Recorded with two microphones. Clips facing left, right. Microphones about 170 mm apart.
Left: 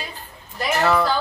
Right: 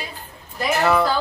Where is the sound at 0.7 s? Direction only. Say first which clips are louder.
Right 1 dB; 5° right (ahead or behind).